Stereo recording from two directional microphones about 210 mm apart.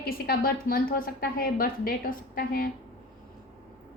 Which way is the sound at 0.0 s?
45° left (ahead or behind).